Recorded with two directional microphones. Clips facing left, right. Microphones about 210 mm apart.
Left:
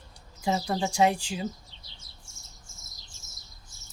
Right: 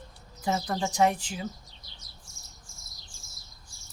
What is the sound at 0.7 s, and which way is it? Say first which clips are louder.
Chirp: even; 20° left (ahead or behind).